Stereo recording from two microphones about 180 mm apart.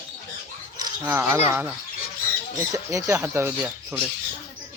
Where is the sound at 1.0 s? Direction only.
15° right (ahead or behind).